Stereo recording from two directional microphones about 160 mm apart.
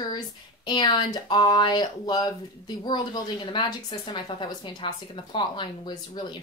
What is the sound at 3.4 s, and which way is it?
Speech, 30° left (ahead or behind).